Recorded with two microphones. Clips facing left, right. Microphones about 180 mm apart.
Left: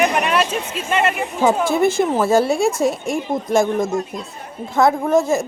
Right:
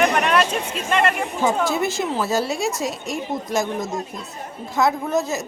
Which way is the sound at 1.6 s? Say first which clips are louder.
Left 6 dB; 55° left (ahead or behind).